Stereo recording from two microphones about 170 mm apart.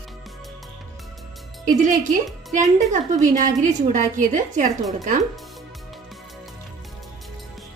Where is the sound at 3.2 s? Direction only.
50° right (ahead or behind).